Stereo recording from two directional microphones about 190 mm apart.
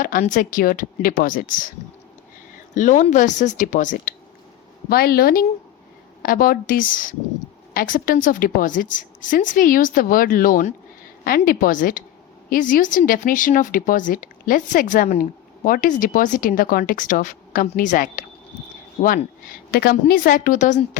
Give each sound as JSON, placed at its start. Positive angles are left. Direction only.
{"t": 0.0, "sound": "a woman's voice", "side_deg": 45}
{"t": 2.7, "sound": "a woman's voice", "side_deg": 40}